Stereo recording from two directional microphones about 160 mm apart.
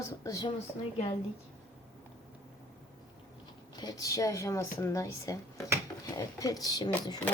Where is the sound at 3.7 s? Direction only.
25° left (ahead or behind).